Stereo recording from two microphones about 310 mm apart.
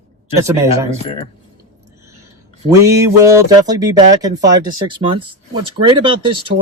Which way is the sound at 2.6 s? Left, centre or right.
Centre.